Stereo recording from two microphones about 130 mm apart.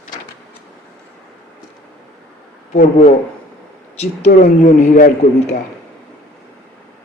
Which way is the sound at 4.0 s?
55° left (ahead or behind).